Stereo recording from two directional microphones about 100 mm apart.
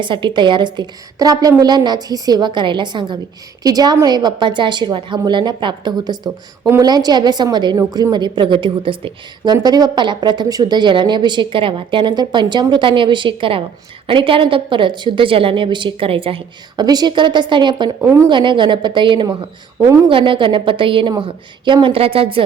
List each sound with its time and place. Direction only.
0.0 s a woman's voice: 55° right (ahead or behind)
3.6 s a woman's voice: 40° right (ahead or behind); by 9.5 s 60° right (ahead or behind)
9.5 s a woman's voice: 45° right (ahead or behind); by 16.4 s 65° right (ahead or behind)
16.7 s a woman's voice: 45° right (ahead or behind)
18.0 s a woman's voice: 30° right (ahead or behind)
18.3 s a woman's voice: 55° right (ahead or behind)